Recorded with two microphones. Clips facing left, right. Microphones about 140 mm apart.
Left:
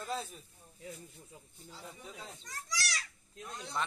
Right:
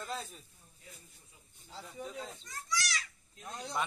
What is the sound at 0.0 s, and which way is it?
Snake, 5° left (ahead or behind).